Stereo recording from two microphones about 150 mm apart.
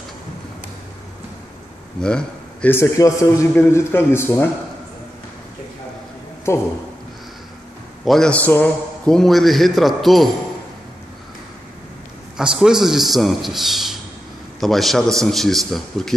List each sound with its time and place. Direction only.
2.0 s a man's voice: 5° left (ahead or behind)
6.5 s a man's voice: 15° left (ahead or behind)
8.0 s a man's voice: 5° left (ahead or behind)
12.4 s a man's voice: 5° right (ahead or behind)